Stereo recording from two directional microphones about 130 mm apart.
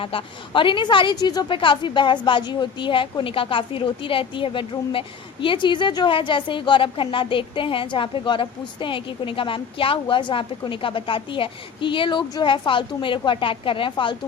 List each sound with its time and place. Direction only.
0.0 s a woman's voice: 45° left (ahead or behind)